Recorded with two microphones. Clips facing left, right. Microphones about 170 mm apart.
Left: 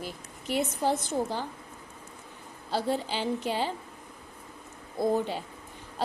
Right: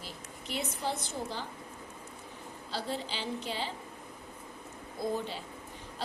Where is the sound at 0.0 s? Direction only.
45° left (ahead or behind).